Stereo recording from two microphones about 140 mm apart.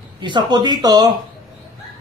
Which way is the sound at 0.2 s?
30° right (ahead or behind).